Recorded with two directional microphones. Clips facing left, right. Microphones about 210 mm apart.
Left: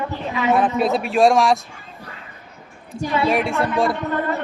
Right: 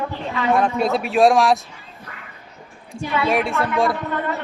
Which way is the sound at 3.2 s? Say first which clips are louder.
Even; centre (ahead or behind).